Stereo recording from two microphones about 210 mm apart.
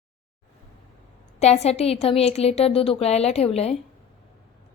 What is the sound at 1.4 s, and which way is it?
A woman's voice, 30° left (ahead or behind).